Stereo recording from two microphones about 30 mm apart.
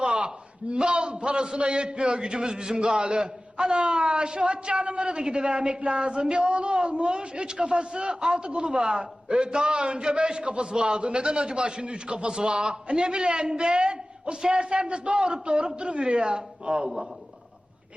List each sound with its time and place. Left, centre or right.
0.0 s a sound: right
0.7 s a man's voice: right
2.7 s a man's voice: right